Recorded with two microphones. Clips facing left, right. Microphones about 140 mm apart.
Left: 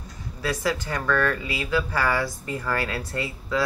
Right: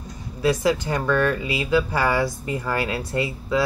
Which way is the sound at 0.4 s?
20° right (ahead or behind).